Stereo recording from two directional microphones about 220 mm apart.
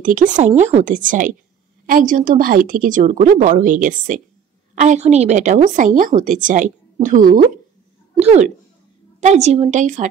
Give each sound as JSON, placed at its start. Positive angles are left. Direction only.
{"t": 0.0, "sound": "a woman's voice", "side_deg": -35}